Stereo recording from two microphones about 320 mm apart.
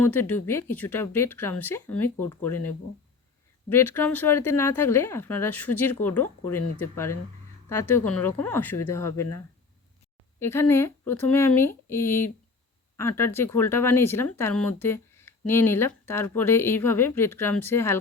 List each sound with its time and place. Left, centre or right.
0.0 s speech: centre
3.7 s speech: centre
6.6 s speech: left
6.9 s speech: centre
10.4 s speech: centre